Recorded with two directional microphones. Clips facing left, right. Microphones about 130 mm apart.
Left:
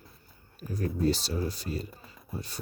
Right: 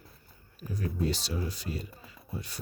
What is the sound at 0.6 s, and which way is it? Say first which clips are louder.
Speech: left 2 dB; 45° left (ahead or behind).